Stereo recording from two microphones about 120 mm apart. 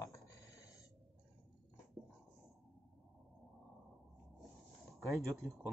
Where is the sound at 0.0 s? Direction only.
30° left (ahead or behind).